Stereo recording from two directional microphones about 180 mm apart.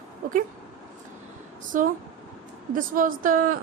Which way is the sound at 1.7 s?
45° right (ahead or behind).